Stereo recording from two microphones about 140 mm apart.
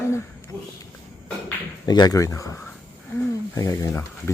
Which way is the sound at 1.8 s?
30° left (ahead or behind).